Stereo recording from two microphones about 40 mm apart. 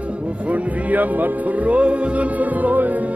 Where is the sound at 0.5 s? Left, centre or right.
Right.